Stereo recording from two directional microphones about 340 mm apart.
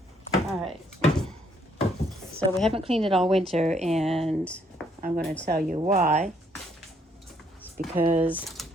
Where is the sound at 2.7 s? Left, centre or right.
Centre.